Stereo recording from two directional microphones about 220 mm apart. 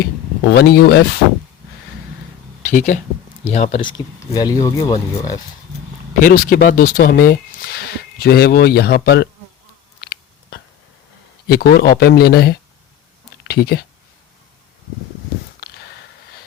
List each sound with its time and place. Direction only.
0.5 s speech: 45° left (ahead or behind)
2.6 s speech: 35° left (ahead or behind); by 4.9 s 15° left (ahead or behind)
6.2 s speech: 40° left (ahead or behind)
11.4 s speech: 45° left (ahead or behind)